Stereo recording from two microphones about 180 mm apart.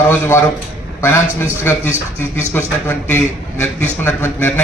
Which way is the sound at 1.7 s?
10° left (ahead or behind).